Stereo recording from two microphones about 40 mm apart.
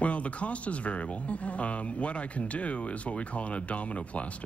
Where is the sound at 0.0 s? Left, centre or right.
Left.